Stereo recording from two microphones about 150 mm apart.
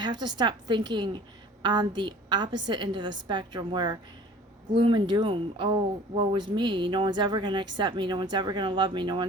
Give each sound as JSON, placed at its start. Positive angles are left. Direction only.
{"t": 0.0, "sound": "a woman's voice", "side_deg": -30}